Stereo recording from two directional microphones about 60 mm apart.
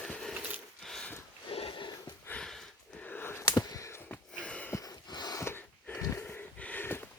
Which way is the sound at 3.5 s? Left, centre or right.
Left.